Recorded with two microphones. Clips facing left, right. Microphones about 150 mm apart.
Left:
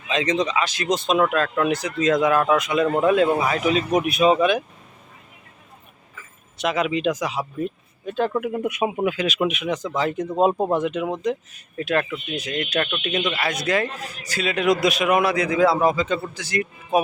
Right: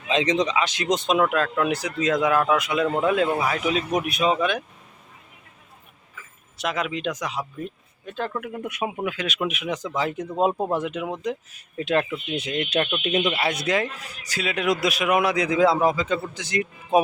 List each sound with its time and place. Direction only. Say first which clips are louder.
0.1 s a man's voice: even; 20° right (ahead or behind); by 4.6 s 5° left (ahead or behind)
6.6 s speech: left 5 dB; centre (ahead or behind)
8.3 s speech: left 7 dB; 15° left (ahead or behind); by 10.2 s 10° right (ahead or behind)
10.5 s speech: left 3 dB; 15° left (ahead or behind)
10.8 s a man's voice: left 4 dB; 5° right (ahead or behind)
11.9 s a man's voice: even; 20° right (ahead or behind)
16.3 s speech: left 1 dB; 20° right (ahead or behind)